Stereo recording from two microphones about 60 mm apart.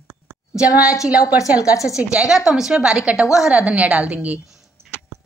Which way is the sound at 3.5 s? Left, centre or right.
Right.